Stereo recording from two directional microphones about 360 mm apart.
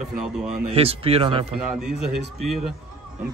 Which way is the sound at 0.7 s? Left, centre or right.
Centre.